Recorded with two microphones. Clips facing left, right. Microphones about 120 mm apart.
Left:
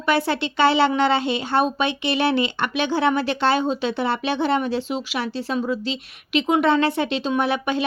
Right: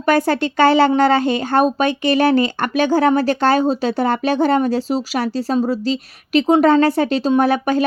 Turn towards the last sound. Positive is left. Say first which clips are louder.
# right 6 dB
turn(degrees=-40)  # may be behind; listen again after turning